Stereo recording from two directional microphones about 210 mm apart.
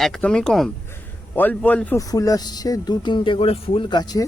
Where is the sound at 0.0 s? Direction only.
5° left (ahead or behind); by 4.3 s 20° left (ahead or behind).